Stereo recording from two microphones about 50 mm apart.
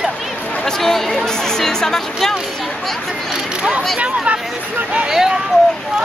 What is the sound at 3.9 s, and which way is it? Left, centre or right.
Speech, right.